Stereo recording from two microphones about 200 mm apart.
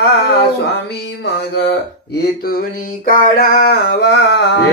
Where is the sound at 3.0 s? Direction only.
45° left (ahead or behind).